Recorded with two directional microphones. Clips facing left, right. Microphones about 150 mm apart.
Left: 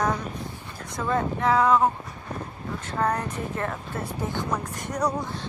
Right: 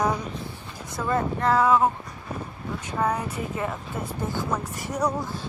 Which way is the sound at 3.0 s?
5° right (ahead or behind).